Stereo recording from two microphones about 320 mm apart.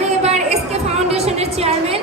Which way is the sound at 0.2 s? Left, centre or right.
Centre.